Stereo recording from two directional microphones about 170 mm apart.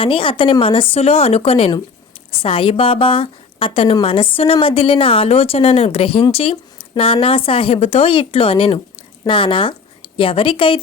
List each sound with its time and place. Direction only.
0.0 s a woman's voice: 30° left (ahead or behind)